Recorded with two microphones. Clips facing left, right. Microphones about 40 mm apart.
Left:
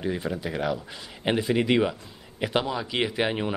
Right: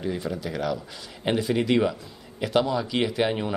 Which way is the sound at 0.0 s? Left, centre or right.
Centre.